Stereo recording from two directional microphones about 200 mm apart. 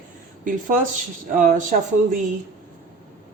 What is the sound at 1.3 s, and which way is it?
Speech, 40° right (ahead or behind).